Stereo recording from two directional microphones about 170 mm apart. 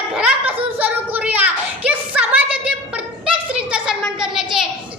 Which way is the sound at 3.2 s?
5° right (ahead or behind).